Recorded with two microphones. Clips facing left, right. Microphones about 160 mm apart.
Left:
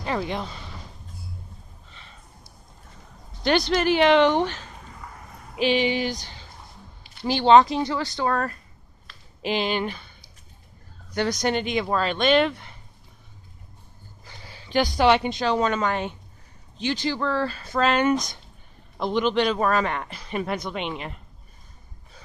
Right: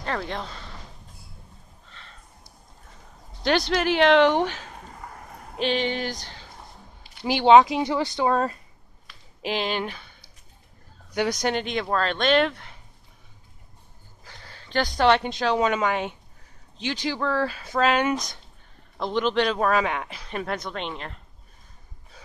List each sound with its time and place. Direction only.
0.0 s speech: 10° left (ahead or behind)
3.4 s speech: centre (ahead or behind)
5.0 s a sound: 50° right (ahead or behind)
5.6 s speech: 5° left (ahead or behind)
7.2 s speech: 10° right (ahead or behind)
9.4 s speech: centre (ahead or behind)
11.1 s speech: 5° right (ahead or behind)
14.2 s a woman's voice: 5° left (ahead or behind)